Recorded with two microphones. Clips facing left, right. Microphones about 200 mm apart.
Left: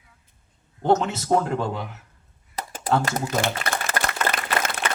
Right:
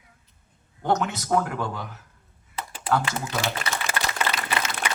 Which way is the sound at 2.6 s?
40° left (ahead or behind).